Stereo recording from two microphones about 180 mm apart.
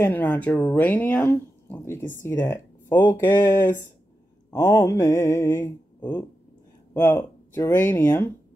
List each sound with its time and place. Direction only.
0.0 s speech: 10° left (ahead or behind)
6.9 s speech: 10° left (ahead or behind)